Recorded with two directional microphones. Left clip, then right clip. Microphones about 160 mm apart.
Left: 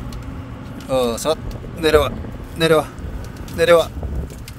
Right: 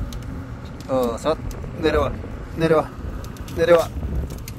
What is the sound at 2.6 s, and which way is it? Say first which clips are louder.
A man's voice: left 3 dB; 55° left (ahead or behind).